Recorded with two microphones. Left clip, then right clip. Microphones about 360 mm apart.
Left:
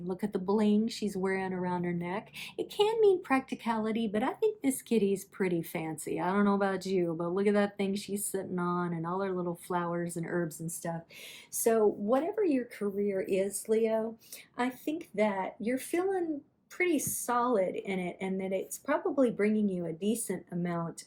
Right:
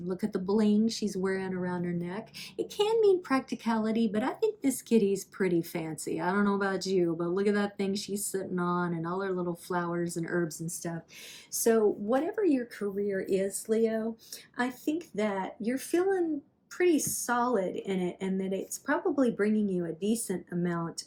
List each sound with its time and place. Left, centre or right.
0.1 s speech: centre